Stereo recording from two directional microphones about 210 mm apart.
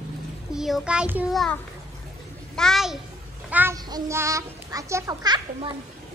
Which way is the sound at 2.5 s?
Centre (ahead or behind).